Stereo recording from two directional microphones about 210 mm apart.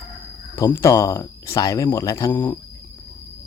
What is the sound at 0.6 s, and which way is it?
Speech, 15° left (ahead or behind).